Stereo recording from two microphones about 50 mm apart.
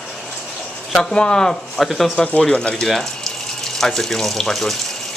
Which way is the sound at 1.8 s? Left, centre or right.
Centre.